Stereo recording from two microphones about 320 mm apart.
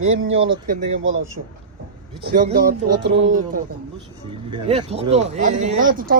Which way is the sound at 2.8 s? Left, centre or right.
Right.